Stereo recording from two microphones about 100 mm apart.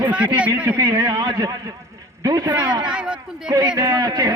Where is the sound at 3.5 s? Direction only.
40° right (ahead or behind).